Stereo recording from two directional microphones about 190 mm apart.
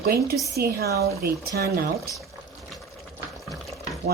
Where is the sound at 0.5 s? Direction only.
55° right (ahead or behind).